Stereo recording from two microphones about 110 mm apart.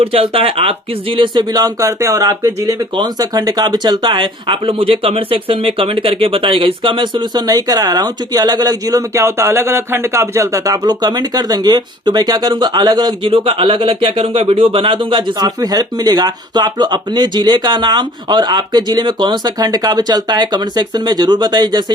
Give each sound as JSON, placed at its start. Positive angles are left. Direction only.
{"t": 0.0, "sound": "speech", "side_deg": -60}
{"t": 13.2, "sound": "speech", "side_deg": -55}